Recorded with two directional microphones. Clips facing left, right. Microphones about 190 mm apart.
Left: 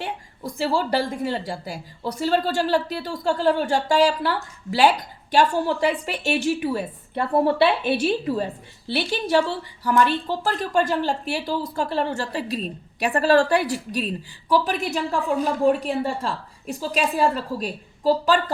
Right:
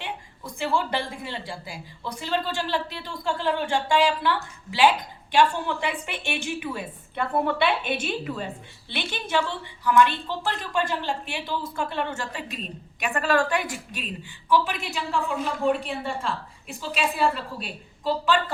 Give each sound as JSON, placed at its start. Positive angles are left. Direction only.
{"t": 0.0, "sound": "a woman's voice", "side_deg": 40}